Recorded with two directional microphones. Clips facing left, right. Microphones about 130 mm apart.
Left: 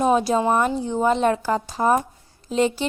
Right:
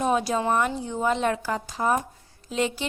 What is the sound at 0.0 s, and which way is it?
A woman's voice, 30° left (ahead or behind).